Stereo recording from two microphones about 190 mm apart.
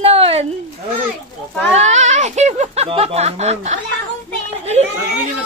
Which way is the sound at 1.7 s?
35° right (ahead or behind).